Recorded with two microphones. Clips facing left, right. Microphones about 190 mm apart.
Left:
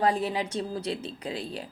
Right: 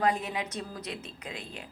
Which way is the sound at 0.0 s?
30° left (ahead or behind).